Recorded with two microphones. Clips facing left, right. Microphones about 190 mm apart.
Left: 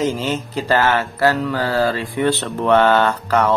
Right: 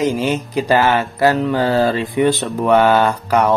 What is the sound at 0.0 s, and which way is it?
Mantra, 15° right (ahead or behind).